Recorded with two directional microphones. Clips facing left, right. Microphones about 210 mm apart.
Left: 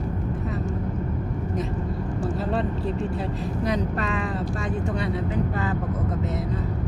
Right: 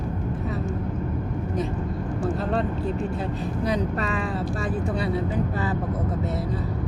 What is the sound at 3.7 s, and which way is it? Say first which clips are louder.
Speech: even; centre (ahead or behind).